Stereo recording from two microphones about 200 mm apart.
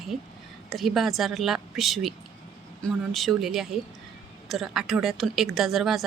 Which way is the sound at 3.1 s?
Centre (ahead or behind).